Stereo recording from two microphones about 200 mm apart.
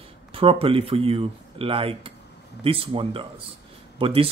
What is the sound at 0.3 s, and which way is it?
A man's voice, 25° right (ahead or behind).